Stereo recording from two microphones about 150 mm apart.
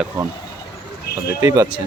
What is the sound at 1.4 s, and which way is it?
Speech, 20° right (ahead or behind).